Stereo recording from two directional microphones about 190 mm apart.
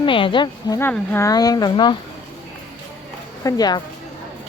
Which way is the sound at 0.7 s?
10° left (ahead or behind).